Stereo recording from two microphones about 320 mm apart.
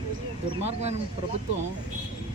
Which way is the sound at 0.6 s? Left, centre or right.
Centre.